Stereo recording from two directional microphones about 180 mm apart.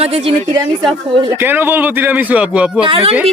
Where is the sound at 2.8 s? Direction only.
30° right (ahead or behind).